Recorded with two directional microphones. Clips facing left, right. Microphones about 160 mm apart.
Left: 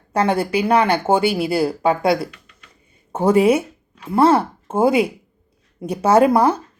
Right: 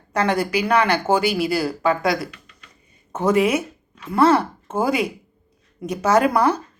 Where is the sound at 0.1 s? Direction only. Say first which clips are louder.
Left 2 dB; 30° left (ahead or behind).